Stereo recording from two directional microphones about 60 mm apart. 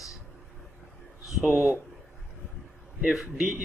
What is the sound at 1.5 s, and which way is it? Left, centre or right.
Speech, right.